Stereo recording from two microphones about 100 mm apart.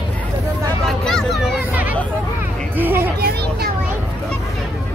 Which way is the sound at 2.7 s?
20° right (ahead or behind).